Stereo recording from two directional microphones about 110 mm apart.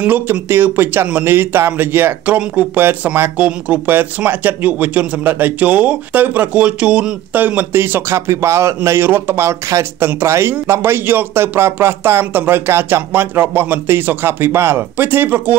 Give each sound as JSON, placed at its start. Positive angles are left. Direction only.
{"t": 0.0, "sound": "speech", "side_deg": -15}